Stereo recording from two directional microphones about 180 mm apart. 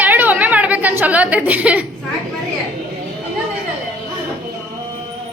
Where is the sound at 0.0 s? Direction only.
10° right (ahead or behind).